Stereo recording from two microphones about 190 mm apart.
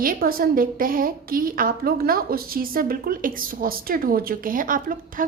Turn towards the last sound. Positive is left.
turn(degrees=-45)  # may be behind; listen again after turning